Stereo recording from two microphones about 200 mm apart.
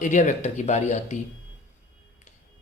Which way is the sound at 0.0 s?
40° left (ahead or behind).